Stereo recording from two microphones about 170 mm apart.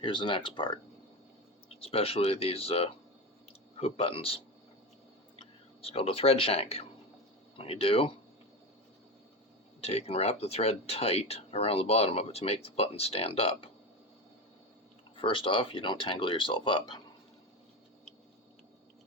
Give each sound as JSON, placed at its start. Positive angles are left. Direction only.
{"t": 0.0, "sound": "speech", "side_deg": 30}
{"t": 1.8, "sound": "speech", "side_deg": 35}
{"t": 5.4, "sound": "speech", "side_deg": 35}
{"t": 9.8, "sound": "speech", "side_deg": 40}
{"t": 15.1, "sound": "speech", "side_deg": 30}